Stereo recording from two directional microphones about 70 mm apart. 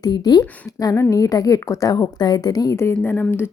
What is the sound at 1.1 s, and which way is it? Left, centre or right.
A woman's voice, left.